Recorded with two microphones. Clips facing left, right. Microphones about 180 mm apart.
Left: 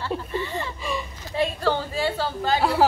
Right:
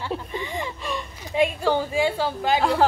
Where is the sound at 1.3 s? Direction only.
15° right (ahead or behind).